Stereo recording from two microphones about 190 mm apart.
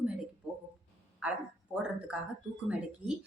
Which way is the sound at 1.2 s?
5° right (ahead or behind).